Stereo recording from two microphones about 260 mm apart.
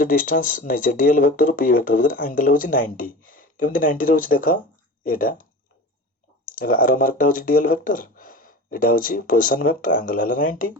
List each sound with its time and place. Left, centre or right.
0.0 s speech: left